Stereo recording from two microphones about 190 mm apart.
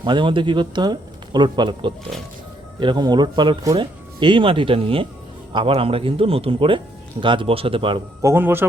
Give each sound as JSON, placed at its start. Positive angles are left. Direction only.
{"t": 0.0, "sound": "speech", "side_deg": -25}
{"t": 8.2, "sound": "a man's voice", "side_deg": -15}